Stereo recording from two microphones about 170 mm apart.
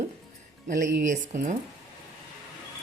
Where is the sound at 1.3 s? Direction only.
50° right (ahead or behind).